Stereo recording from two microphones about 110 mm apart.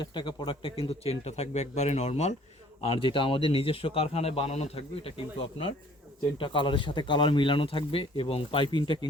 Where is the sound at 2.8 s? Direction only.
55° left (ahead or behind).